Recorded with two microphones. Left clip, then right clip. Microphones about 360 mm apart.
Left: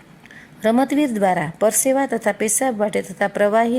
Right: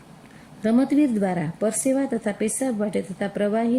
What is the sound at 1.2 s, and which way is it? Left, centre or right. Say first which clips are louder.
A woman's voice: left 7 dB; left.